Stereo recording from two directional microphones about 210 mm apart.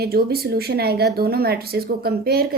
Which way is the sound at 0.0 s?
45° right (ahead or behind).